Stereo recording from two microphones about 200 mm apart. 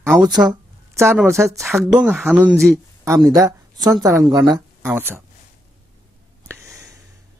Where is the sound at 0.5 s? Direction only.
15° right (ahead or behind).